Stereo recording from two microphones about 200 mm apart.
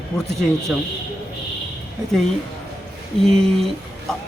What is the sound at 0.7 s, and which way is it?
Speech, centre (ahead or behind).